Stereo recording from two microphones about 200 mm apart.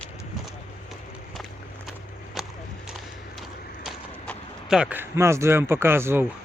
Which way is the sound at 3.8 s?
Centre (ahead or behind).